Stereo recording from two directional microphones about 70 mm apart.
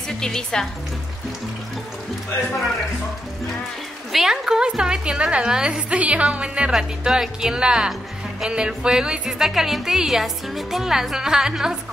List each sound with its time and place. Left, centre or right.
0.2 s speech: centre
4.1 s speech: centre